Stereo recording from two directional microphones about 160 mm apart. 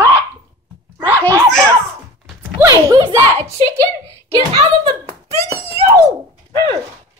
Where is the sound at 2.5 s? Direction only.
20° right (ahead or behind).